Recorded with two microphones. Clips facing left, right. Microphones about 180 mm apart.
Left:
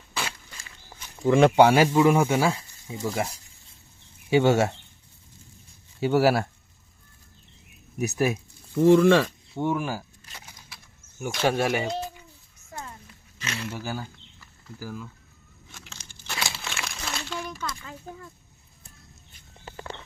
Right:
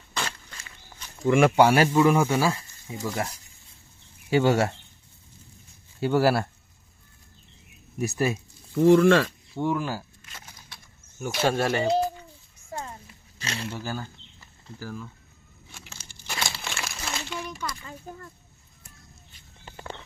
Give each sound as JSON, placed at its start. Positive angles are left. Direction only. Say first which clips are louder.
{"t": 0.1, "sound": "walk", "louder": "even", "side_deg": 10}
{"t": 1.2, "sound": "speech", "louder": "left 2 dB", "side_deg": 20}
{"t": 4.3, "sound": "speech", "louder": "left 1 dB", "side_deg": 20}
{"t": 6.0, "sound": "speech", "louder": "left 1 dB", "side_deg": 10}
{"t": 7.9, "sound": "speech", "louder": "left 1 dB", "side_deg": 10}
{"t": 10.3, "sound": "a sound", "louder": "even", "side_deg": 10}
{"t": 11.4, "sound": "speech", "louder": "even", "side_deg": 10}
{"t": 13.4, "sound": "speech", "louder": "even", "side_deg": -30}
{"t": 13.7, "sound": "speech", "louder": "left 1 dB", "side_deg": 10}
{"t": 15.7, "sound": "a sound", "louder": "even", "side_deg": -10}
{"t": 16.1, "sound": "crumpling", "louder": "even", "side_deg": -10}
{"t": 17.7, "sound": "a sound", "louder": "even", "side_deg": 0}